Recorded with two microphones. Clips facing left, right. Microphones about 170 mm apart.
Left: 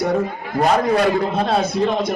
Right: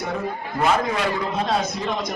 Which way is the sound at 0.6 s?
40° left (ahead or behind).